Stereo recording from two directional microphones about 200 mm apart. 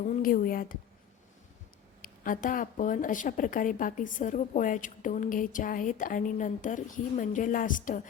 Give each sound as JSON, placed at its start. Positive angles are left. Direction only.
{"t": 0.0, "sound": "speech", "side_deg": 40}
{"t": 2.0, "sound": "speech", "side_deg": 40}